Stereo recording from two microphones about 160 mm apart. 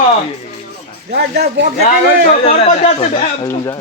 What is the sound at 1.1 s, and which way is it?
Speech, 85° right.